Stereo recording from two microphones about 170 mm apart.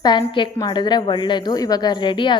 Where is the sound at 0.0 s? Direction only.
25° left (ahead or behind).